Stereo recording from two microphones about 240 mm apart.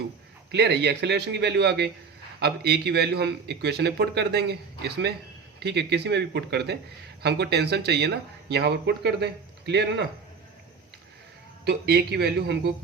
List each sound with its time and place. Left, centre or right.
0.5 s speech: right
11.6 s speech: right